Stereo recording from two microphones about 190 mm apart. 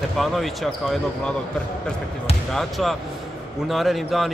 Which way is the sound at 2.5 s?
Centre (ahead or behind).